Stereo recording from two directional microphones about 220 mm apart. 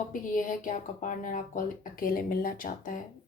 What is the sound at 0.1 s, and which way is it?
Speech, 35° left (ahead or behind).